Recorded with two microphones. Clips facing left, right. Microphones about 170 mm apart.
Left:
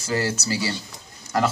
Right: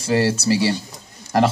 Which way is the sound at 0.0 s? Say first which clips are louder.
Right 6 dB; 30° right (ahead or behind).